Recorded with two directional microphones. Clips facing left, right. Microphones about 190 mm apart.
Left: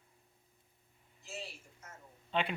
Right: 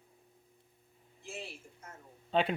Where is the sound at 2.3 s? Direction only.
40° right (ahead or behind).